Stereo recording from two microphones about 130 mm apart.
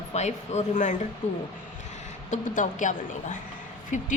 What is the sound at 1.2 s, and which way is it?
Speech, 60° left (ahead or behind).